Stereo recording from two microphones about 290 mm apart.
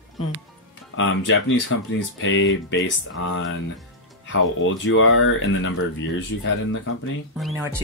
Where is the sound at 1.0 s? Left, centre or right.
Left.